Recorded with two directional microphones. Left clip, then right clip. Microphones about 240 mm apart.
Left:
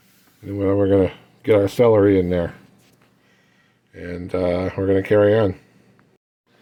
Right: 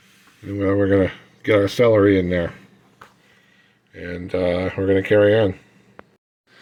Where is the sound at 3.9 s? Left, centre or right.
Centre.